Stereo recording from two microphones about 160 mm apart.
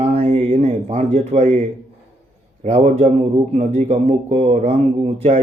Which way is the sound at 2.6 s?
45° right (ahead or behind).